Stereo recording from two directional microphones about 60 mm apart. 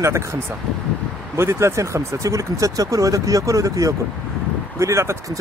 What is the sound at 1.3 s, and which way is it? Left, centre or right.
Speech, right.